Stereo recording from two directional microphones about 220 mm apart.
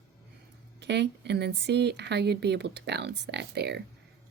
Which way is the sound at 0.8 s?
50° right (ahead or behind).